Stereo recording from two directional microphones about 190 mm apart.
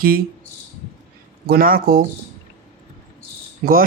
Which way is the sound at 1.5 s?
50° right (ahead or behind).